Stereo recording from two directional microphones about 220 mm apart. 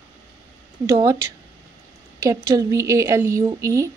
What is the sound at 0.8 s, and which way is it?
A woman's voice, 15° right (ahead or behind).